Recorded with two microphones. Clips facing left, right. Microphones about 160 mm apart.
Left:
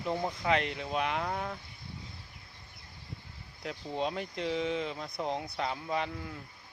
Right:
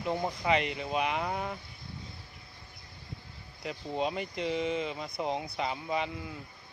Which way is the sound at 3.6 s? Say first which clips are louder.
Right 1 dB; 5° right (ahead or behind).